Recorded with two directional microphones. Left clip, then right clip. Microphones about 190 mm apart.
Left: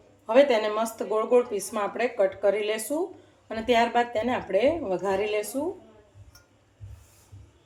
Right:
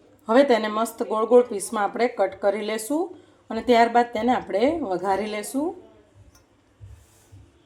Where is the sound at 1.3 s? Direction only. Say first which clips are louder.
Right 7 dB; 30° right (ahead or behind).